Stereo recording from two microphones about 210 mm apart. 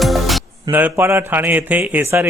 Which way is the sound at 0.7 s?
10° right (ahead or behind).